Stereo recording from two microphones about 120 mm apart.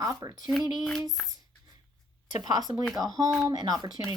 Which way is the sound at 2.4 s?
35° right (ahead or behind).